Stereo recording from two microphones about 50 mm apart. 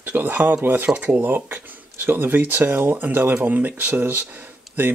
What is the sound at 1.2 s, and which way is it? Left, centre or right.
Speech, right.